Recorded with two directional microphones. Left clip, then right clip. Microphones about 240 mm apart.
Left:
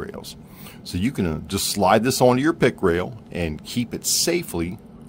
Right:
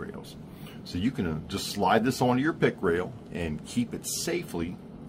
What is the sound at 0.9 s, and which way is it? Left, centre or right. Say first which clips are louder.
Speech: left 6 dB; left.